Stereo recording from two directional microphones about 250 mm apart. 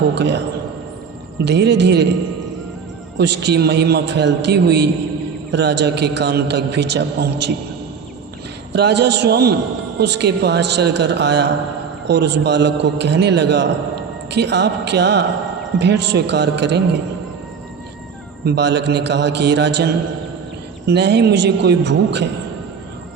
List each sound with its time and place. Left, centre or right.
0.1 s a man's voice: right
1.5 s a man's voice: right
3.2 s a man's voice: right
8.7 s a man's voice: right
18.4 s a man's voice: right